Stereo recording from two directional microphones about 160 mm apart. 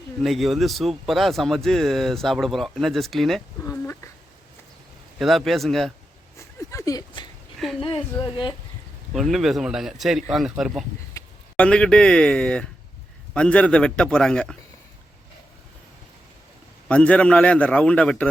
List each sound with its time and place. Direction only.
0.2 s speech: centre (ahead or behind)
3.6 s a sound: 20° left (ahead or behind)
5.2 s speech: centre (ahead or behind)
6.7 s a sound: 20° left (ahead or behind)
7.8 s a woman's voice: 30° left (ahead or behind)
9.1 s a man's voice: centre (ahead or behind)
16.9 s a man's voice: 10° left (ahead or behind)